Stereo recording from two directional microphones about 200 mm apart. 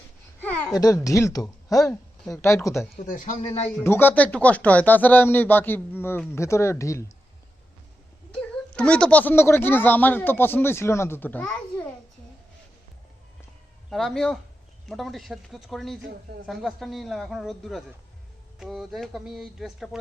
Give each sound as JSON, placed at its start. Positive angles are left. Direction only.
{"t": 0.4, "sound": "a child's voice", "side_deg": 15}
{"t": 2.9, "sound": "a man's voice", "side_deg": 40}
{"t": 3.8, "sound": "speech", "side_deg": 10}
{"t": 8.4, "sound": "speech", "side_deg": 5}
{"t": 13.9, "sound": "a man's voice", "side_deg": 0}